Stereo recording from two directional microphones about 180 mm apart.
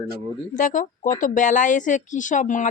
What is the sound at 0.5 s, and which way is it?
Speech, 45° left (ahead or behind).